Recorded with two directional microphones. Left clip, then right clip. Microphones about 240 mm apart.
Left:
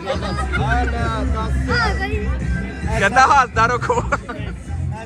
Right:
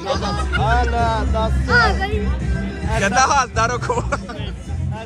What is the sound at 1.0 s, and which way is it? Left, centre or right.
Speech, right.